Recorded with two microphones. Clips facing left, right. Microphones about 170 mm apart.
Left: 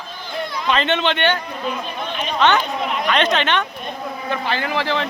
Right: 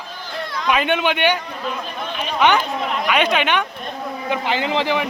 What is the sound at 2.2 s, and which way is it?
Chatter, 10° right (ahead or behind).